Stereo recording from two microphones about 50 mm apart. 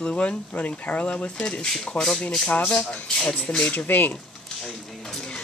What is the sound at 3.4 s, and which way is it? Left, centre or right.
Speech, left.